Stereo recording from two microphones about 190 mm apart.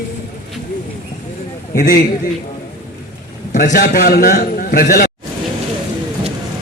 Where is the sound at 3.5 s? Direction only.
45° left (ahead or behind).